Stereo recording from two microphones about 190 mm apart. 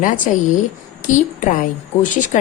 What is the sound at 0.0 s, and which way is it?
A woman's voice, 40° left (ahead or behind).